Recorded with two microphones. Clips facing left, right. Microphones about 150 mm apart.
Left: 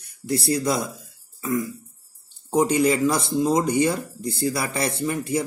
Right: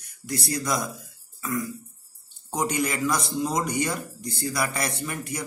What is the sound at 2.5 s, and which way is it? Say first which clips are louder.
A man's voice: left 8 dB; 30° left (ahead or behind).